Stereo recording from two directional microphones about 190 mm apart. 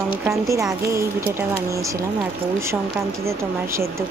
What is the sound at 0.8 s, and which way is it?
Speech, 15° right (ahead or behind).